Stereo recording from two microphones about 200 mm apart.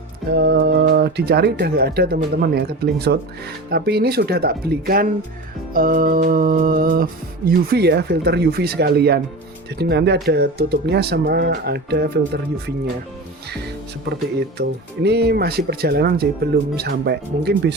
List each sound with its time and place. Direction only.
0.3 s speech: 60° right (ahead or behind)
14.3 s speech: 55° right (ahead or behind)